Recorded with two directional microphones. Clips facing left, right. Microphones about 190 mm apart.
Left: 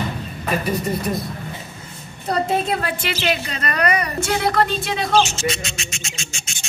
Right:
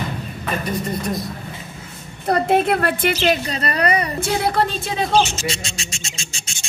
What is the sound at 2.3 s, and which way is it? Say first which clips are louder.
Speech: right 4 dB; 60° right (ahead or behind).